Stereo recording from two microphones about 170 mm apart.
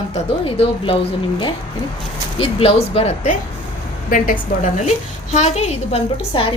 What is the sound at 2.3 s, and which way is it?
A woman's voice, 35° left (ahead or behind).